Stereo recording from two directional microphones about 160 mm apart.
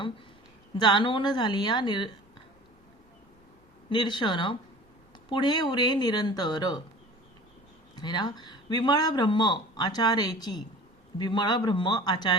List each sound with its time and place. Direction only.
0.8 s speech: 30° left (ahead or behind)
3.8 s speech: 30° left (ahead or behind)
7.9 s speech: 25° left (ahead or behind)